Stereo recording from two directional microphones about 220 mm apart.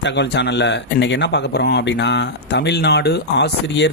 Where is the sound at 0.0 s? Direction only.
55° left (ahead or behind).